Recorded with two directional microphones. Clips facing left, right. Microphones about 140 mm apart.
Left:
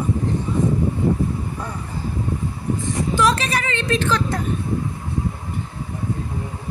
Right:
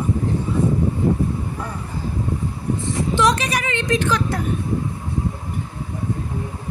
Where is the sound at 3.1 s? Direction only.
20° right (ahead or behind).